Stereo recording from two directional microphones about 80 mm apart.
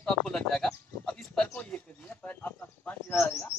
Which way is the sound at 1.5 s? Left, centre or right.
Centre.